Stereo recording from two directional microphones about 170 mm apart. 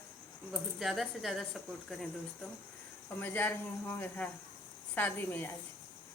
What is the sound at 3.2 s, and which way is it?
Speech, 10° left (ahead or behind).